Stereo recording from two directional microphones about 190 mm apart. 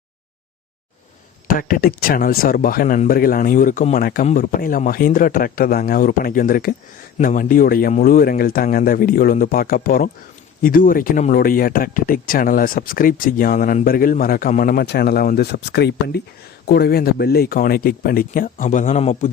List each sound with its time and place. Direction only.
1.5 s speech: 45° left (ahead or behind)